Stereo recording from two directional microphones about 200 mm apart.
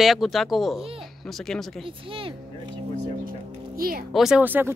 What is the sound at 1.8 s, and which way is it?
Speech, 25° right (ahead or behind).